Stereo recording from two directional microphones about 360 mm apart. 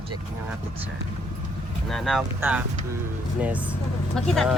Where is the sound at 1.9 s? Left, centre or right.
Centre.